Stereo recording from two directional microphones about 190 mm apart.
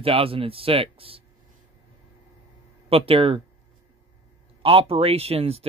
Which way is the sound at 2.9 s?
30° right (ahead or behind).